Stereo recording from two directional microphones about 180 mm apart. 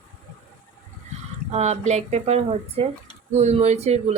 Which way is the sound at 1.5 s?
40° right (ahead or behind).